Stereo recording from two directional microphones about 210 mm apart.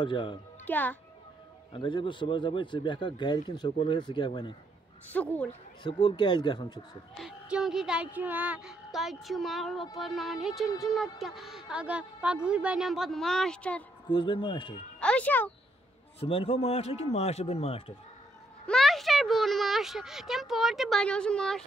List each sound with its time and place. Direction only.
0.0 s a man's voice: 25° left (ahead or behind)
0.7 s speech: 10° left (ahead or behind)
1.7 s a man's voice: 25° left (ahead or behind)
5.1 s speech: 5° left (ahead or behind)
5.9 s a man's voice: 20° left (ahead or behind)
7.2 s a woman's voice: 5° right (ahead or behind)
14.0 s a man's voice: 25° left (ahead or behind)
15.0 s speech: 5° left (ahead or behind)
16.2 s a man's voice: 25° left (ahead or behind)
18.7 s a woman's voice: centre (ahead or behind)